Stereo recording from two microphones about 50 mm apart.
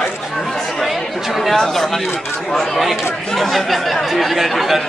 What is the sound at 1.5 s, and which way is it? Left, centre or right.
Speech, centre.